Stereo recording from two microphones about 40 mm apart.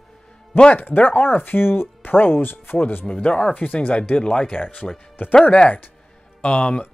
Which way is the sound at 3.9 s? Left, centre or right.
Left.